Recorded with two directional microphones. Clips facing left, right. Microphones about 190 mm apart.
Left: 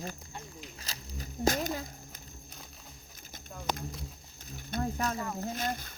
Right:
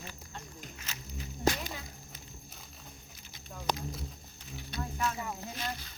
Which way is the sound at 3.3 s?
50° left (ahead or behind).